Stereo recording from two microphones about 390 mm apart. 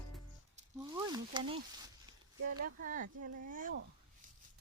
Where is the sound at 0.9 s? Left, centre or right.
Centre.